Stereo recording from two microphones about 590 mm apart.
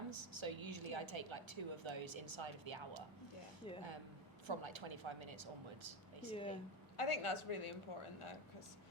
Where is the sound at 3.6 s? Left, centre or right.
Centre.